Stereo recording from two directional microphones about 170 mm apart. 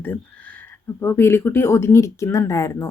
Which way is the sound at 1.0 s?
15° left (ahead or behind).